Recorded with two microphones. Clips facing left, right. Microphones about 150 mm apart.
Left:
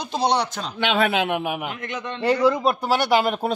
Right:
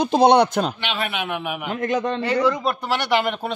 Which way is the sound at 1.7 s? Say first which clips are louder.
Right 8 dB; 35° right (ahead or behind).